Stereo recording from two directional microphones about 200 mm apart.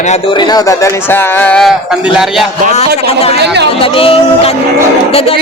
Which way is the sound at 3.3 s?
55° right (ahead or behind).